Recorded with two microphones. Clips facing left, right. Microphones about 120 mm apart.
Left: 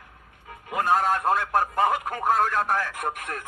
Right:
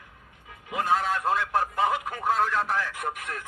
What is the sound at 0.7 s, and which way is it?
A man's voice, 50° left (ahead or behind).